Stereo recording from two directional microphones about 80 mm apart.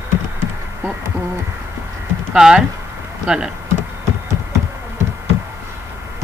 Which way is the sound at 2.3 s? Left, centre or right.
Centre.